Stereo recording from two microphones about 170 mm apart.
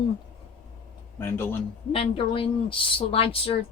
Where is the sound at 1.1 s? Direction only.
15° left (ahead or behind).